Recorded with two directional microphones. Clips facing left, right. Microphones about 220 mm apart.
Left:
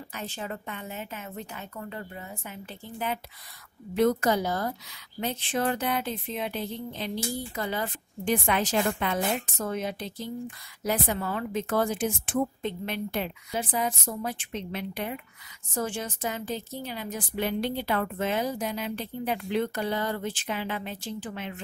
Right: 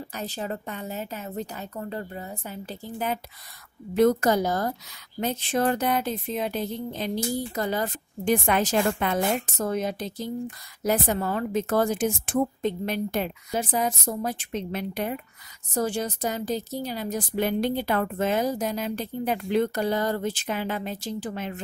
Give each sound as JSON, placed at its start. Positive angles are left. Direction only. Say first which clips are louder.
{"t": 0.1, "sound": "a woman's voice", "louder": "right 3 dB", "side_deg": -35}